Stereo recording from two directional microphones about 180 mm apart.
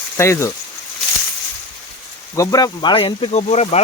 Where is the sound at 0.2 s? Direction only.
15° left (ahead or behind).